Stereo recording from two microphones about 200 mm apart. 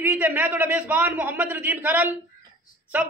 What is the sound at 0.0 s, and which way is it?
A man's voice, 10° right (ahead or behind).